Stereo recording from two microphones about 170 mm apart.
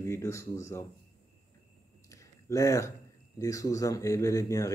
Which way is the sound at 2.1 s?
20° left (ahead or behind).